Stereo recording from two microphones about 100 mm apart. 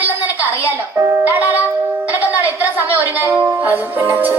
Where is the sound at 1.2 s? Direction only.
15° right (ahead or behind).